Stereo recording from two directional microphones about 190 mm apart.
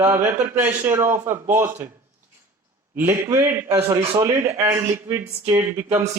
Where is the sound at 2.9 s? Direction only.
10° right (ahead or behind).